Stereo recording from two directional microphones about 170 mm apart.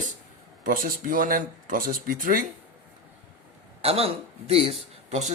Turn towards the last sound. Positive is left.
turn(degrees=-40)  # may be behind; listen again after turning